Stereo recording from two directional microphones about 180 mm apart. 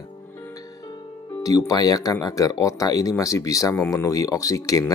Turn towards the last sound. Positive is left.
turn(degrees=20)  # may be behind; listen again after turning